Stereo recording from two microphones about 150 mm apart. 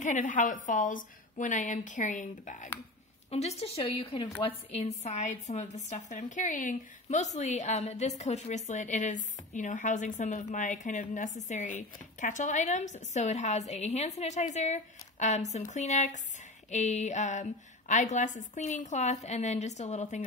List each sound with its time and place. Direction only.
0.0 s a woman's voice: 55° left (ahead or behind)
3.3 s a woman's voice: 45° left (ahead or behind)